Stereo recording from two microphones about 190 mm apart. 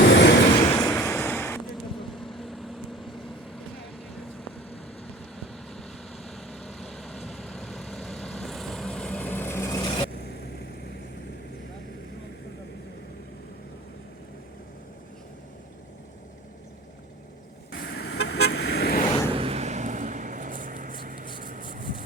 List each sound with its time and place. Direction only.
0.0 s train: 60° left (ahead or behind)
0.8 s waves: 15° left (ahead or behind)
1.7 s vehicle: centre (ahead or behind)
5.0 s vehicle: centre (ahead or behind); by 10.1 s 20° left (ahead or behind)
17.7 s vehicle: 60° left (ahead or behind)
19.4 s vehicle: 30° right (ahead or behind)